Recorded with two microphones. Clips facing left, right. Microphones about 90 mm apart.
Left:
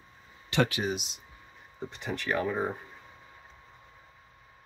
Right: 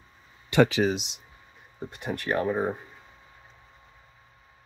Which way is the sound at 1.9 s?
50° right (ahead or behind).